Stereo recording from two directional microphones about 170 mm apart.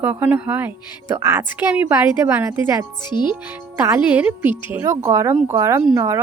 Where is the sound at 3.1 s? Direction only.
25° left (ahead or behind).